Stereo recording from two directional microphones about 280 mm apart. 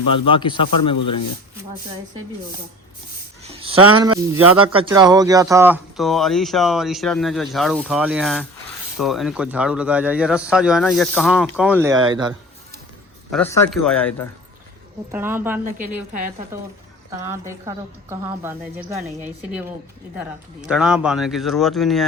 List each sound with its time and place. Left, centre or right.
0.1 s speech: centre
3.6 s speech: centre
13.3 s speech: centre
15.1 s a woman's voice: centre
15.6 s speech: right
17.2 s a woman's voice: centre